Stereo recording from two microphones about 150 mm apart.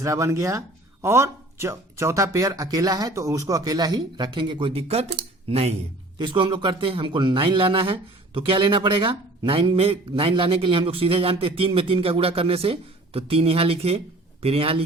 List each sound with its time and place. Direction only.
0.0 s speech: 20° right (ahead or behind); by 5.7 s 40° right (ahead or behind)
6.1 s speech: 30° right (ahead or behind)